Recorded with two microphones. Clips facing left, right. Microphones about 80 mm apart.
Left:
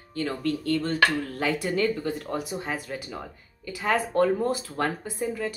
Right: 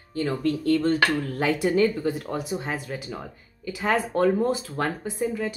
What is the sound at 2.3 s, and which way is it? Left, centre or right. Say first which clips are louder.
Speech: right 1 dB; centre.